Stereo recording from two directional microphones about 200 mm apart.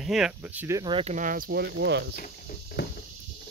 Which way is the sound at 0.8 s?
25° right (ahead or behind).